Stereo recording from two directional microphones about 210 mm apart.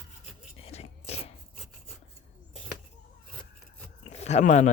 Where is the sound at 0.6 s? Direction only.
30° left (ahead or behind).